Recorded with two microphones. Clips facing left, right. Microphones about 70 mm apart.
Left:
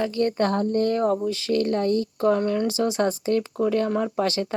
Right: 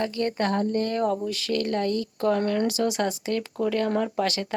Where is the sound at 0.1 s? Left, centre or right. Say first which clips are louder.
Left 3 dB; right.